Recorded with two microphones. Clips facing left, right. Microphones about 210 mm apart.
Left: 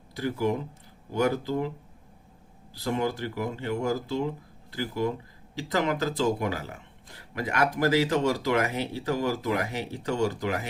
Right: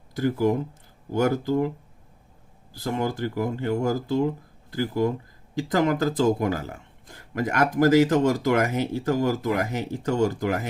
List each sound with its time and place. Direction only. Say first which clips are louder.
0.2 s speech: right 5 dB; 45° right (ahead or behind)
2.7 s speech: right 1 dB; 45° right (ahead or behind)